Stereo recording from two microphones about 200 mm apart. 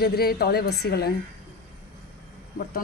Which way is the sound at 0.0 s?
50° left (ahead or behind).